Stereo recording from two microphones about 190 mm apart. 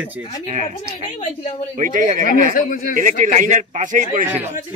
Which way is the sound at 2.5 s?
45° left (ahead or behind).